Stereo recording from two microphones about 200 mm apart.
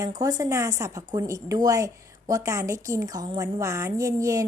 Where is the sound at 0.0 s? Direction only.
20° right (ahead or behind).